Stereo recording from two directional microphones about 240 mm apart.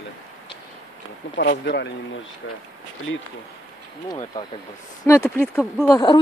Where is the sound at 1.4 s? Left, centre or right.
Left.